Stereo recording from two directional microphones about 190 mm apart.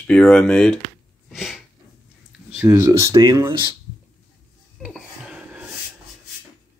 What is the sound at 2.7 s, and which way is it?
Speech, 20° right (ahead or behind).